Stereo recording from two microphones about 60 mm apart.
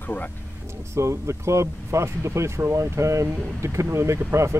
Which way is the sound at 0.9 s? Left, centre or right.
Right.